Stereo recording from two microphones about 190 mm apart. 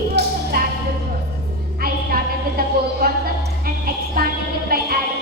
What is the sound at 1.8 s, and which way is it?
Music, 50° right (ahead or behind).